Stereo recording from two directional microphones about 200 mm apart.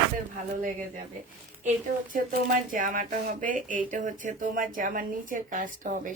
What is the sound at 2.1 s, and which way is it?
Speech, 40° right (ahead or behind).